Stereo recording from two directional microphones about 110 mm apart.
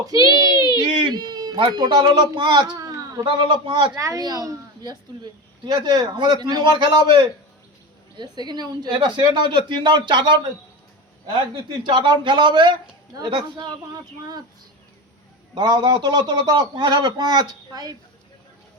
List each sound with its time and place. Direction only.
0.0 s speech: 35° right (ahead or behind)
3.2 s speech: 50° right (ahead or behind)
3.9 s a woman's voice: 30° right (ahead or behind)
11.3 s speech: 45° right (ahead or behind)
15.5 s a woman's voice: 40° right (ahead or behind)